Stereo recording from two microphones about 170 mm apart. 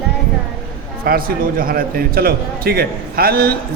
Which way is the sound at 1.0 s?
60° right (ahead or behind).